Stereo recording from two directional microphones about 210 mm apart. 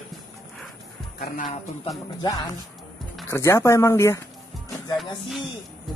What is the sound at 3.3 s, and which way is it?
Speech, 15° left (ahead or behind).